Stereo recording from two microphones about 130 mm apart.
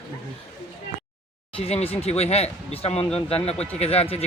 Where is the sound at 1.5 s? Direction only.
50° left (ahead or behind).